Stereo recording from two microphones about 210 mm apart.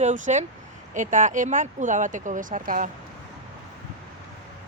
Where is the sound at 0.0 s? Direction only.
35° right (ahead or behind).